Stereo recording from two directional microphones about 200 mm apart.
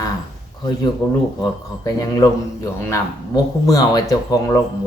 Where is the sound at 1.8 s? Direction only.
15° left (ahead or behind).